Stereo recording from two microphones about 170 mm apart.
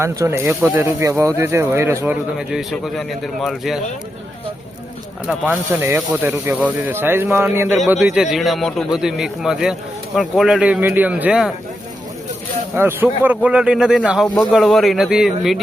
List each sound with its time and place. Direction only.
0.0 s speech: 15° right (ahead or behind)
2.5 s a man's voice: centre (ahead or behind)
5.5 s speech: 10° right (ahead or behind)
8.0 s a man's voice: centre (ahead or behind)
12.7 s a man's voice: 10° right (ahead or behind)